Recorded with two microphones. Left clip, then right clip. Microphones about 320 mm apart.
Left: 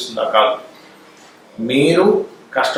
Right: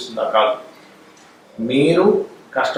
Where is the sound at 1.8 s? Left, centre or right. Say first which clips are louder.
Left 1 dB; centre.